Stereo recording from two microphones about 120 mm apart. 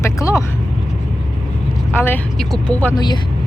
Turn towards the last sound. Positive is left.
turn(degrees=35)  # may be behind; listen again after turning